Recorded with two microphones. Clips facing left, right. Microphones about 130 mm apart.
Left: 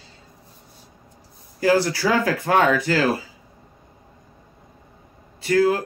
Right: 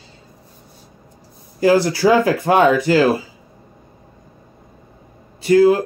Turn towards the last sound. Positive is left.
turn(degrees=-15)  # may be behind; listen again after turning